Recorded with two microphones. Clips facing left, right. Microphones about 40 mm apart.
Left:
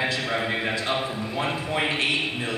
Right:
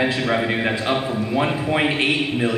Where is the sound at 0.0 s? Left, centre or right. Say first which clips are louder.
Right 5 dB; centre.